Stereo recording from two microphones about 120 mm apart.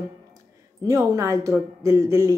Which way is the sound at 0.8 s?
25° right (ahead or behind).